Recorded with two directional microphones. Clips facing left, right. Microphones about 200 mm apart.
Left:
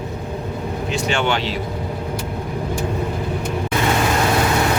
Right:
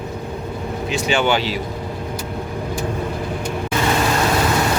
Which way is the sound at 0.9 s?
5° right (ahead or behind).